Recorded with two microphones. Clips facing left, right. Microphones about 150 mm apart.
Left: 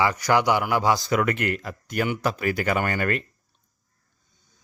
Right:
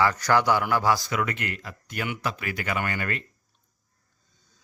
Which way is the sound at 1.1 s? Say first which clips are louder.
Left 6 dB; 50° left (ahead or behind).